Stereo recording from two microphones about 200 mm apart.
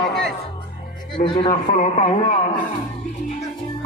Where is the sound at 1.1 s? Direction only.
25° left (ahead or behind).